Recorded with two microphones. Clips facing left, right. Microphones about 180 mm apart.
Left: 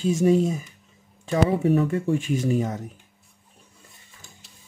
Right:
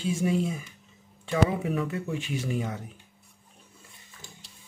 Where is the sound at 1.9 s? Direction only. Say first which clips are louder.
Left 8 dB; 45° left (ahead or behind).